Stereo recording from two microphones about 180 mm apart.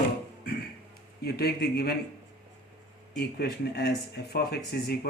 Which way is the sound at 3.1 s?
65° left (ahead or behind).